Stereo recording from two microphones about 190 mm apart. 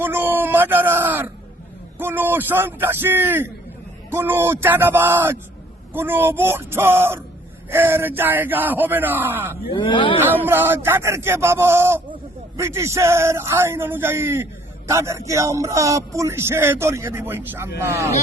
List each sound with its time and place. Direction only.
0.0 s speech: 10° right (ahead or behind)
9.7 s speech: 25° left (ahead or behind)
10.4 s speech: 10° right (ahead or behind)